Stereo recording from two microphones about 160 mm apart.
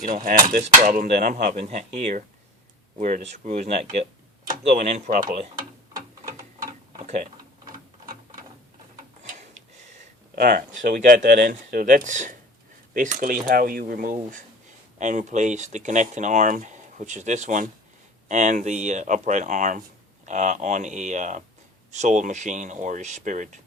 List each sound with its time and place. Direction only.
0.0 s speech: 60° right (ahead or behind)
0.6 s speech: 45° right (ahead or behind)
5.2 s speech: 30° right (ahead or behind)
10.3 s speech: 65° right (ahead or behind)